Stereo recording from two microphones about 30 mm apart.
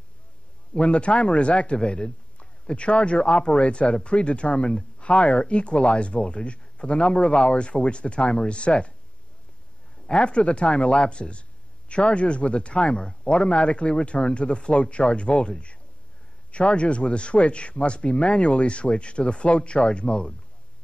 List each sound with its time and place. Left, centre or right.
0.7 s speech: left
1.8 s a man's voice: left
10.0 s speech: left
16.5 s speech: left